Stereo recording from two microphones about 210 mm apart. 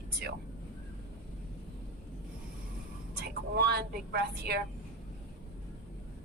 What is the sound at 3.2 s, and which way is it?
A woman's voice, 50° right (ahead or behind).